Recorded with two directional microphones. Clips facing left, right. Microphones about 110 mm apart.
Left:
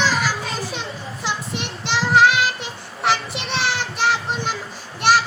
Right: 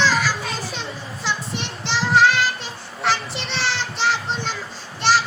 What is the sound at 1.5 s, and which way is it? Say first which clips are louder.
Child singing: left 1 dB; 15° left (ahead or behind).